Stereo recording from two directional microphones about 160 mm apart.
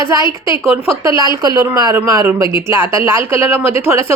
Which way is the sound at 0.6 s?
15° right (ahead or behind).